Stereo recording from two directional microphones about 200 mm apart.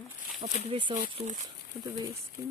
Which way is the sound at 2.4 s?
15° right (ahead or behind).